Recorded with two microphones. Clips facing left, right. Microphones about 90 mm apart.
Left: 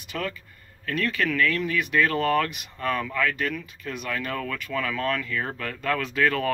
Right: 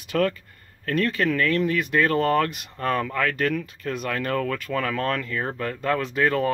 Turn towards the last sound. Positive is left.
turn(degrees=-25)  # may be behind; listen again after turning